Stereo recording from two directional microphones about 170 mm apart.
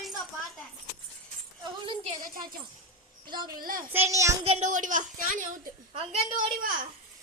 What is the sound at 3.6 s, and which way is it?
Speech, 55° right (ahead or behind).